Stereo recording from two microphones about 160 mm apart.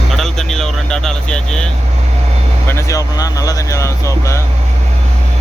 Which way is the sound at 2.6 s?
20° left (ahead or behind).